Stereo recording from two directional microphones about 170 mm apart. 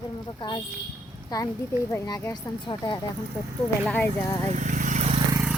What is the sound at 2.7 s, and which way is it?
Speech, 25° left (ahead or behind).